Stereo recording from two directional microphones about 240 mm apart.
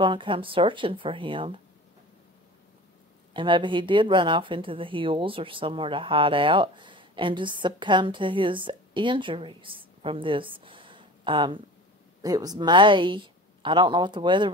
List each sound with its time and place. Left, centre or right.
0.0 s speech: centre
3.3 s speech: centre